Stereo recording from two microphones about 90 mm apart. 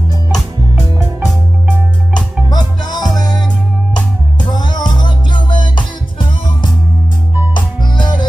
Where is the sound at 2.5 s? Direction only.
50° left (ahead or behind).